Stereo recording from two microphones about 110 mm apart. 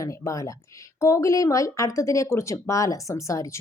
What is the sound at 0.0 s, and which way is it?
Speech, 30° left (ahead or behind).